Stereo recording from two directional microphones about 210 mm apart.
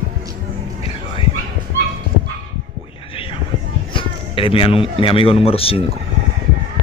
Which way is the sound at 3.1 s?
25° left (ahead or behind).